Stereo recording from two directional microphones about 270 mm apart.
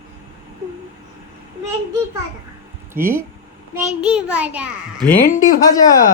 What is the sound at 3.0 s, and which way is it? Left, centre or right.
A child's voice, centre.